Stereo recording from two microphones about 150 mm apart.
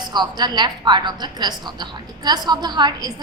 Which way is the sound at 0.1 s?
30° right (ahead or behind).